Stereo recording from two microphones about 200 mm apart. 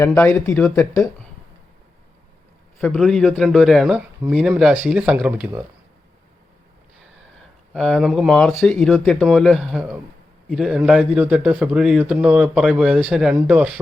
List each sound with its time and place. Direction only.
0.0 s speech: 10° left (ahead or behind)
2.8 s a man's voice: centre (ahead or behind)
7.7 s a man's voice: centre (ahead or behind)